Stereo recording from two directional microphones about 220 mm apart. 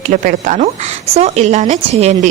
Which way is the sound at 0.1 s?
35° right (ahead or behind).